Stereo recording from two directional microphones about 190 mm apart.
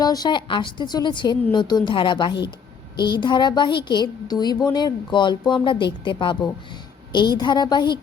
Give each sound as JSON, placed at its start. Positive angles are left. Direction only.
{"t": 0.0, "sound": "a woman's voice", "side_deg": 20}